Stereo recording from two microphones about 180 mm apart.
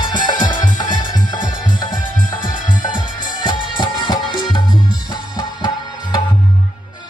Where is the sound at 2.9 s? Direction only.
25° left (ahead or behind).